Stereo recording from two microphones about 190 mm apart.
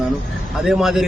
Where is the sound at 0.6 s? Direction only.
Centre (ahead or behind).